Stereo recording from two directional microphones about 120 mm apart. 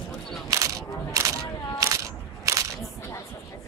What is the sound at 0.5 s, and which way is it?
Single-lens reflex camera, 30° right (ahead or behind).